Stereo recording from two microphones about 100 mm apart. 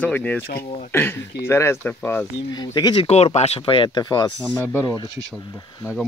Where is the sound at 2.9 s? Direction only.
90° left; by 4.3 s 45° left (ahead or behind).